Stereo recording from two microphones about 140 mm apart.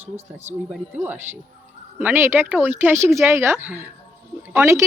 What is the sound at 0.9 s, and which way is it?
Speech, 15° right (ahead or behind).